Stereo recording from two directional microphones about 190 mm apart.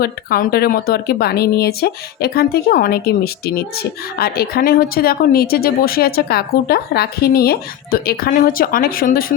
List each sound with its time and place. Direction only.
0.0 s speech: 55° left (ahead or behind)